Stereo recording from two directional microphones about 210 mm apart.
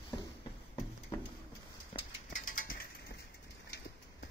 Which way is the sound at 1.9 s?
35° left (ahead or behind).